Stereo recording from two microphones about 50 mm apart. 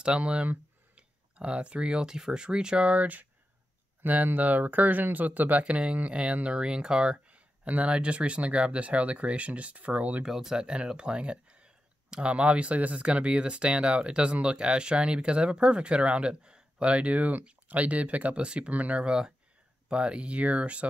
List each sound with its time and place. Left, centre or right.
0.0 s speech: right
10.2 s speech: centre; by 19.0 s right
19.0 s speech: centre